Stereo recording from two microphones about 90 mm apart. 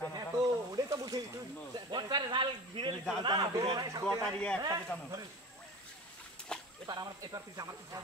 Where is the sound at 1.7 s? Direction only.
50° right (ahead or behind).